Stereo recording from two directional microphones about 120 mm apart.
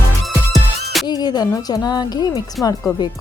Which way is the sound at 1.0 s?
35° left (ahead or behind).